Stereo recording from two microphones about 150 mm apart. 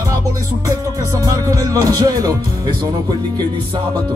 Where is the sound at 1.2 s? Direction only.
25° right (ahead or behind).